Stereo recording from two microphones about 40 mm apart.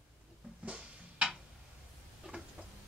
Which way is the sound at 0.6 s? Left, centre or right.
Right.